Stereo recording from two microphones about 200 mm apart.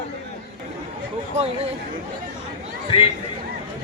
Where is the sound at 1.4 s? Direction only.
30° right (ahead or behind).